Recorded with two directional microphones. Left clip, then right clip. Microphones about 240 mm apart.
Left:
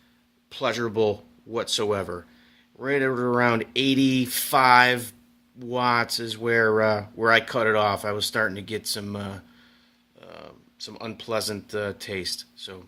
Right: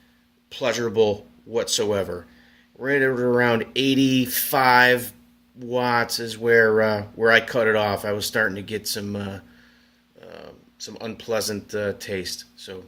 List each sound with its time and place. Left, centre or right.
0.5 s speech: left